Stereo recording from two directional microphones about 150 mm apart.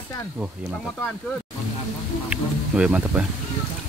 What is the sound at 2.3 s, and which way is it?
Speech, 5° right (ahead or behind).